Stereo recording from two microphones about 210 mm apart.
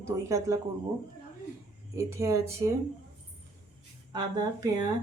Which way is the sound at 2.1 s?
15° right (ahead or behind).